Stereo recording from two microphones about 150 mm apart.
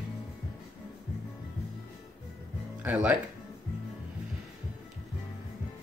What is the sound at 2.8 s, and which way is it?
Speech, 10° right (ahead or behind).